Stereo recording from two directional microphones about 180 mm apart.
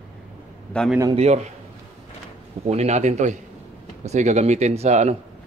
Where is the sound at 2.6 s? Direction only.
40° right (ahead or behind).